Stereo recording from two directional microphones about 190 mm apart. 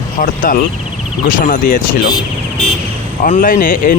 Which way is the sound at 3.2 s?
45° left (ahead or behind).